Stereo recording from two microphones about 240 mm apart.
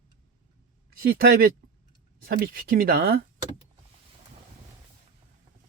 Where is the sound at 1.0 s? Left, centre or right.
Right.